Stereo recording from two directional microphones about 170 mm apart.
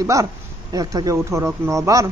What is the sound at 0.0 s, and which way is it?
Speech, 20° right (ahead or behind).